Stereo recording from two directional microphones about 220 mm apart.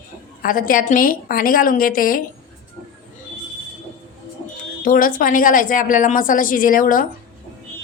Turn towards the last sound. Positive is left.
turn(degrees=40)  # may be behind; listen again after turning